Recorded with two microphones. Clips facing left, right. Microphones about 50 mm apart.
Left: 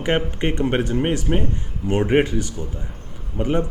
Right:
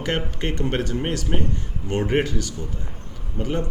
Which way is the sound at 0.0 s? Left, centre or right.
Centre.